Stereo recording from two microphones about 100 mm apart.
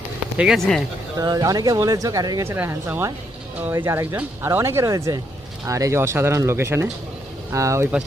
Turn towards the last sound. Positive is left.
turn(degrees=-30)  # may be behind; listen again after turning